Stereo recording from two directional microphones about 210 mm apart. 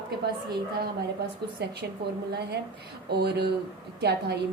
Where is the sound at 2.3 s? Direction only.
50° right (ahead or behind).